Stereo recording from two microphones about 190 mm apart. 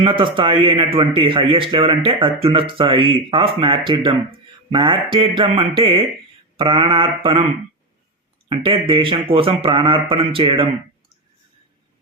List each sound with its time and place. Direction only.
0.0 s a man's voice: 25° right (ahead or behind)
8.4 s a man's voice: 25° right (ahead or behind)